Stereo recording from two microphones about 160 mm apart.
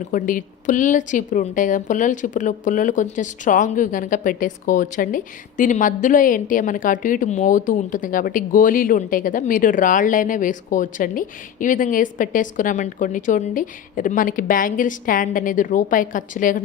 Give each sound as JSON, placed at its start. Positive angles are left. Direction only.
{"t": 0.1, "sound": "a woman's voice", "side_deg": 55}